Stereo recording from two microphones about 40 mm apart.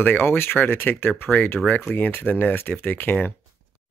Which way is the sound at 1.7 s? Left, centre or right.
Left.